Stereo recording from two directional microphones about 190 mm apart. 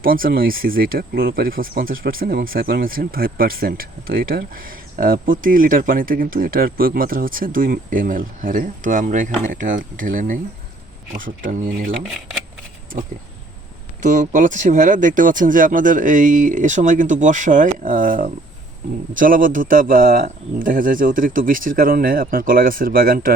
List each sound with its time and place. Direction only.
0.0 s speech: 50° right (ahead or behind)
14.0 s speech: 40° right (ahead or behind)